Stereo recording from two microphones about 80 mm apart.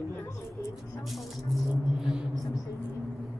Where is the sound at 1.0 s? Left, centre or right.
Centre.